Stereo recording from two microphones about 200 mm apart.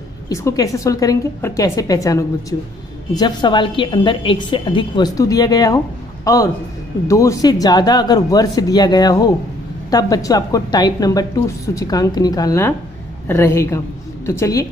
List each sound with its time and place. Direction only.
0.3 s a woman's voice: 15° left (ahead or behind)